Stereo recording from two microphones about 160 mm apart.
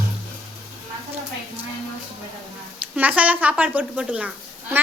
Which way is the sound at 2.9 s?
10° right (ahead or behind).